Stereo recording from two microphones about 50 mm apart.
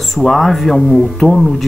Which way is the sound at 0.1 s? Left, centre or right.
Centre.